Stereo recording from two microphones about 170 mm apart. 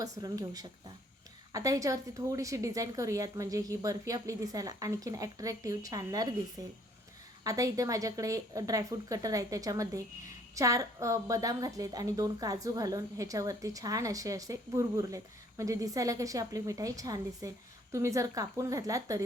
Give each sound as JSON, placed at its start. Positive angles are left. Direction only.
{"t": 0.0, "sound": "a woman's voice", "side_deg": -25}